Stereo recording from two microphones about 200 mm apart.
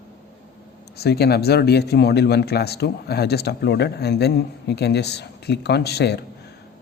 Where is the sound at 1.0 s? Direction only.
55° left (ahead or behind).